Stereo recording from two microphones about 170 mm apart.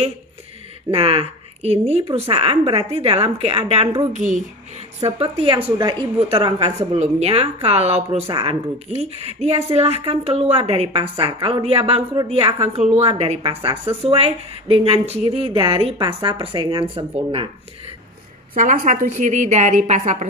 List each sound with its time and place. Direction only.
0.9 s a woman's voice: 35° right (ahead or behind)
4.1 s a woman's voice: 45° right (ahead or behind)
18.6 s a woman's voice: 50° right (ahead or behind)